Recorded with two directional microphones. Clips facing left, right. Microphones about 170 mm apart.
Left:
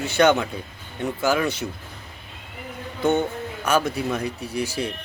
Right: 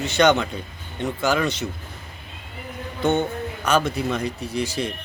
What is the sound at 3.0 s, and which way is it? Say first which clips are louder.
Speech: even; 10° left (ahead or behind).